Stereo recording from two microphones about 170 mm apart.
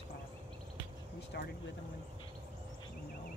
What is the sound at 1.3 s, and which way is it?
Speech, 75° left (ahead or behind).